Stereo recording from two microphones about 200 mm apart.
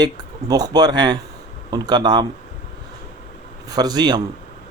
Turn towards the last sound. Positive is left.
turn(degrees=-20)  # may be behind; listen again after turning